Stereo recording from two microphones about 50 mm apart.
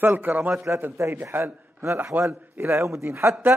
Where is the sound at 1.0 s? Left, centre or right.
Right.